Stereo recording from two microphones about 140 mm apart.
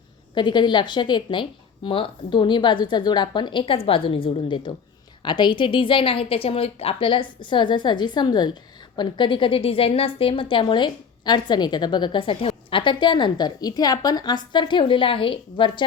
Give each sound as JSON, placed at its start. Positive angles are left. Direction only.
{"t": 0.3, "sound": "a woman's voice", "side_deg": 35}